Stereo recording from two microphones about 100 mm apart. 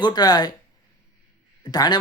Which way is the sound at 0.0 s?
45° left (ahead or behind).